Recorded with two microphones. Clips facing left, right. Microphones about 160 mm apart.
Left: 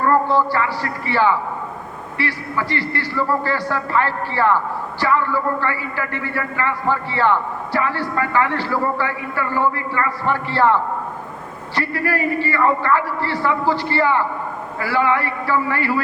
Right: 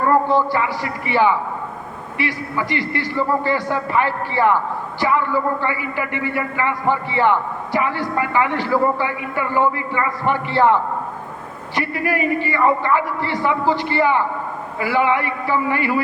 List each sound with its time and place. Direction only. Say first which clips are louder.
0.1 s a man's voice: right 1 dB; 15° right (ahead or behind)